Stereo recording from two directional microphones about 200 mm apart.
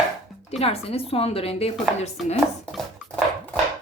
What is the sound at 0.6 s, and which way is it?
A woman's voice, 30° left (ahead or behind).